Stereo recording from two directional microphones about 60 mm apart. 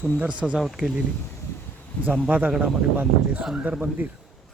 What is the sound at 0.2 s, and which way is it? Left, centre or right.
Speech, centre.